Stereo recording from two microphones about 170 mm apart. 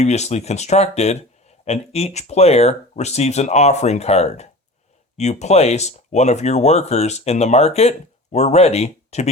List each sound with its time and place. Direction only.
0.0 s speech: 40° left (ahead or behind)